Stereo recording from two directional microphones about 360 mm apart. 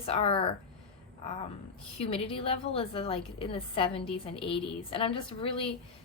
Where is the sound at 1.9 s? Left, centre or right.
Centre.